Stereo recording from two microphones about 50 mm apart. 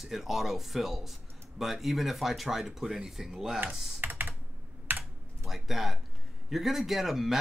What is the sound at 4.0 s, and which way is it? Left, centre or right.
Computer keyboard, right.